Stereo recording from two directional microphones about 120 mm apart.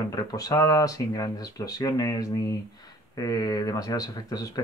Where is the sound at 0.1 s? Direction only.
30° left (ahead or behind).